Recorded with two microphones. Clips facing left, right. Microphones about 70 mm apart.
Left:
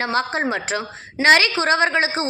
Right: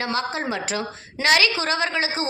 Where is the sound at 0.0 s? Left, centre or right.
Left.